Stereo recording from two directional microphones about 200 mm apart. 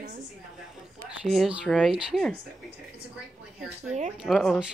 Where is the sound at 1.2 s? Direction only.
Centre (ahead or behind).